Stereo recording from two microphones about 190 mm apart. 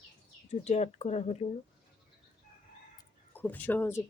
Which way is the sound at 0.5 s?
35° left (ahead or behind).